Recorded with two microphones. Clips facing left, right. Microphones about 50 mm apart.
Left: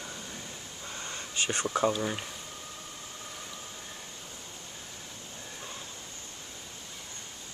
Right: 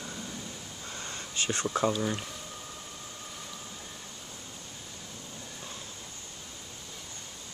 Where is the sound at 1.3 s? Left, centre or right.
Left.